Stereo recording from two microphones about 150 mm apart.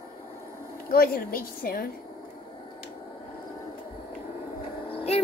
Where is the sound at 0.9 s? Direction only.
85° left.